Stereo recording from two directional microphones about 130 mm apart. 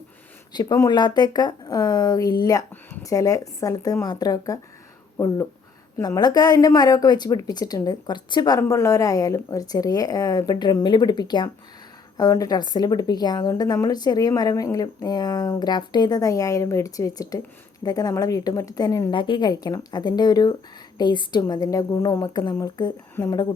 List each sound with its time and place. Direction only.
0.5 s a woman's voice: 30° left (ahead or behind)